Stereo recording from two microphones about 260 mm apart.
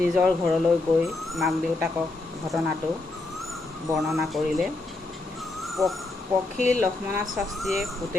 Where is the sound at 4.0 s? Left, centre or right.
Centre.